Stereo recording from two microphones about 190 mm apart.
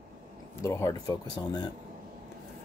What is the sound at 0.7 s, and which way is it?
Speech, 15° left (ahead or behind).